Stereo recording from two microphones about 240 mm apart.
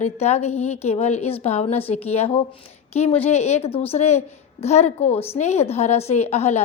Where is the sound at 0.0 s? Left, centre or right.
Left.